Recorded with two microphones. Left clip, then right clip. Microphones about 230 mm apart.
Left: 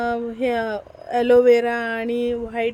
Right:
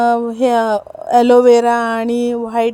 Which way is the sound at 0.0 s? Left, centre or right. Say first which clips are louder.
Right 9 dB; right.